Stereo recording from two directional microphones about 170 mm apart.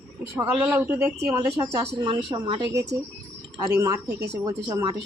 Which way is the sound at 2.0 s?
30° right (ahead or behind).